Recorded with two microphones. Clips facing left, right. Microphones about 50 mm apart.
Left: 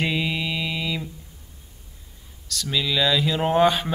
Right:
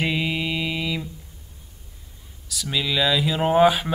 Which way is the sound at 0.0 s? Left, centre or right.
Centre.